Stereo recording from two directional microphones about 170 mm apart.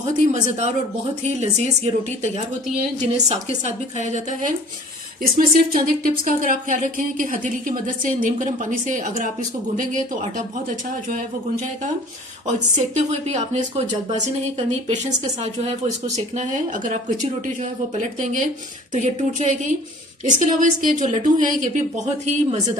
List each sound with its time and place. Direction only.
1.2 s a woman's voice: 40° right (ahead or behind)
3.1 s a woman's voice: 40° right (ahead or behind)
5.2 s speech: 60° right (ahead or behind)
12.5 s speech: 45° right (ahead or behind)